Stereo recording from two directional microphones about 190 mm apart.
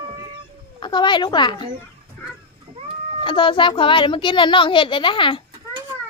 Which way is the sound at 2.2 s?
10° left (ahead or behind).